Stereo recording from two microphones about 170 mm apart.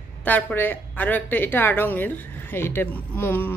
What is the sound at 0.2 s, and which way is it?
A woman's voice, 10° left (ahead or behind).